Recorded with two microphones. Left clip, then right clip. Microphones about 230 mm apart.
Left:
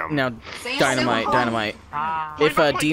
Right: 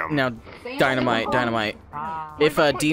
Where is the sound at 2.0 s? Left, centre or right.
Left.